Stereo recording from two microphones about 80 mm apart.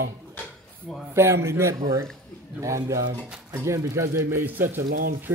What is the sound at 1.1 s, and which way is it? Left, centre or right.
Speech, right.